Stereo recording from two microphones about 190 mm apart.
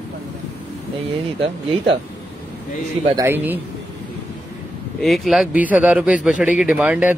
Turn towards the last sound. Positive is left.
turn(degrees=-10)  # may be behind; listen again after turning